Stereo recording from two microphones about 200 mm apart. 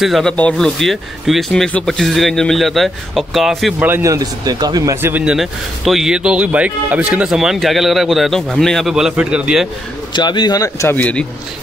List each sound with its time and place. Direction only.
0.0 s speech: centre (ahead or behind)
3.9 s speech: 15° right (ahead or behind)
10.1 s a man's voice: 20° left (ahead or behind)